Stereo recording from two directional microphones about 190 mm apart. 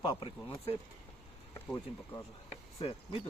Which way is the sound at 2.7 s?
30° left (ahead or behind).